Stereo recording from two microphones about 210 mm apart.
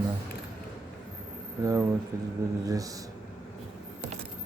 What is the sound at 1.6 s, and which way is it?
Speech, 15° right (ahead or behind).